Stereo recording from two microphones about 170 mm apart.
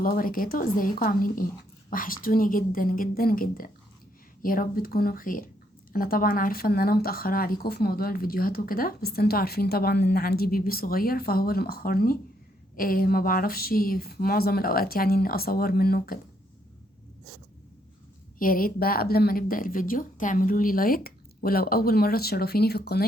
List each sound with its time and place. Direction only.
0.0 s speech: 55° left (ahead or behind)
18.3 s speech: 55° left (ahead or behind)